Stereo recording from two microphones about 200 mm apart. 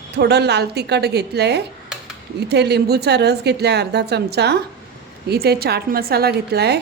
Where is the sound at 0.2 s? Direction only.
55° right (ahead or behind).